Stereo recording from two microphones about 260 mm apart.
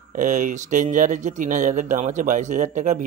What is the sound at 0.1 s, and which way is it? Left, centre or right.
Speech, right.